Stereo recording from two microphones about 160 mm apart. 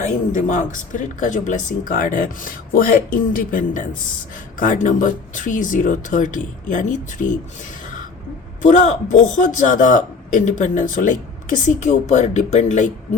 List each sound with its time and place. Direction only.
0.0 s speech: 50° left (ahead or behind)
8.6 s speech: 50° left (ahead or behind)